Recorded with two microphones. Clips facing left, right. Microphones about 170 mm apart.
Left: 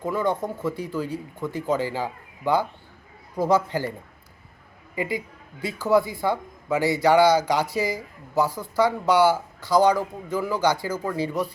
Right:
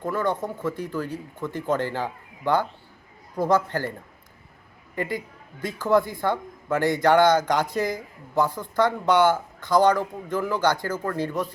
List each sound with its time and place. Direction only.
0.0 s a man's voice: 10° left (ahead or behind)
4.9 s a man's voice: 10° left (ahead or behind)